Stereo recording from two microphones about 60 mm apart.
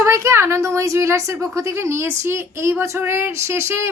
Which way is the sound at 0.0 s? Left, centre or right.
Right.